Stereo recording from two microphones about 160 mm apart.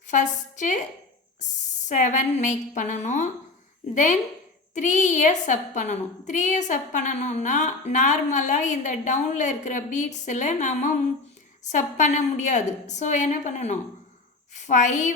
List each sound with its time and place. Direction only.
0.1 s a woman's voice: 50° left (ahead or behind)
1.9 s a woman's voice: 50° left (ahead or behind)